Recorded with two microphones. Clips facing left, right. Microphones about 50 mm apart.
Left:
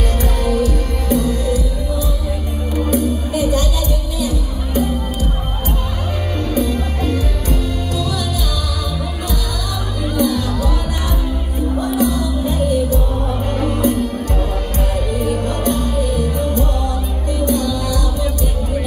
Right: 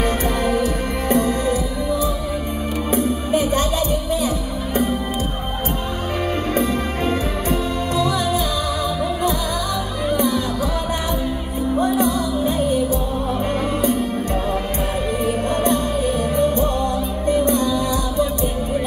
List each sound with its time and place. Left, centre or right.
0.2 s music: right
6.5 s music: right
10.0 s music: right
11.8 s music: right
15.4 s music: right